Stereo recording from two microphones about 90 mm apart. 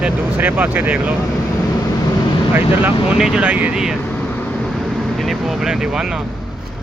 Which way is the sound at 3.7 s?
5° right (ahead or behind).